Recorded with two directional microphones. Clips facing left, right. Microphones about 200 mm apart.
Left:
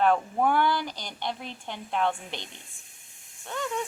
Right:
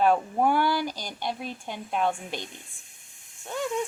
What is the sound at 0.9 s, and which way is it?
Speech, 45° right (ahead or behind).